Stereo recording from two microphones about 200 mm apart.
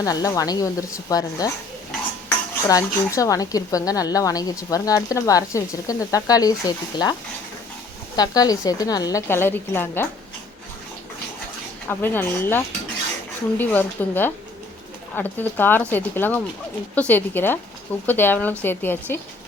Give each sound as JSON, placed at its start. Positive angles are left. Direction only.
{"t": 0.0, "sound": "speech", "side_deg": 15}
{"t": 2.6, "sound": "speech", "side_deg": 15}
{"t": 11.9, "sound": "speech", "side_deg": 10}